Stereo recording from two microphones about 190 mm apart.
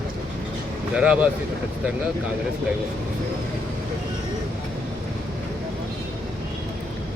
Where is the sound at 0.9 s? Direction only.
5° right (ahead or behind).